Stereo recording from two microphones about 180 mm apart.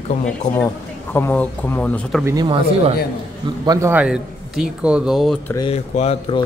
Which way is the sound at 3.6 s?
20° right (ahead or behind).